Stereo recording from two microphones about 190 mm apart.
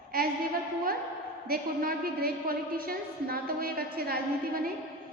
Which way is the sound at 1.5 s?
50° right (ahead or behind).